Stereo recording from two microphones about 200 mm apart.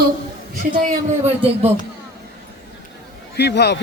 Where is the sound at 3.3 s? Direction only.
55° left (ahead or behind).